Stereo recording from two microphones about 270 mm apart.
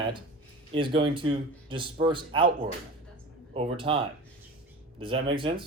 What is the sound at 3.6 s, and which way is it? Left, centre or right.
A man's voice, centre.